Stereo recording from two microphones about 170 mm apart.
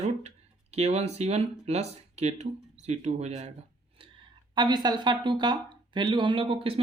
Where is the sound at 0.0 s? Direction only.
40° right (ahead or behind).